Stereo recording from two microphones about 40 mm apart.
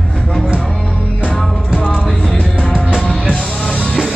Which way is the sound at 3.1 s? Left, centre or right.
Left.